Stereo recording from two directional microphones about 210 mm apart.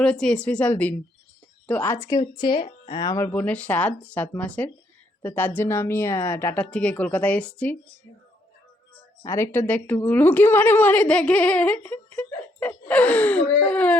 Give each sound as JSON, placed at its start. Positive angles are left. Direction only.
{"t": 0.0, "sound": "a woman's voice", "side_deg": 5}
{"t": 9.2, "sound": "a woman's voice", "side_deg": 15}